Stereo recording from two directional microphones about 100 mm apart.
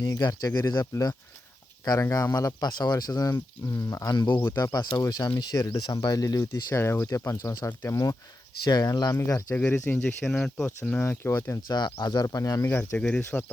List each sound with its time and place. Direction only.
0.0 s speech: 40° left (ahead or behind)
2.6 s speech: 45° left (ahead or behind)
4.1 s speech: 50° left (ahead or behind)
4.4 s speech: 35° left (ahead or behind)
7.7 s speech: 20° left (ahead or behind)
8.6 s speech: 45° left (ahead or behind)
8.9 s speech: 35° left (ahead or behind)
9.8 s speech: 15° left (ahead or behind)
10.7 s speech: 20° left (ahead or behind)
11.7 s speech: 45° left (ahead or behind)
13.0 s speech: 10° left (ahead or behind)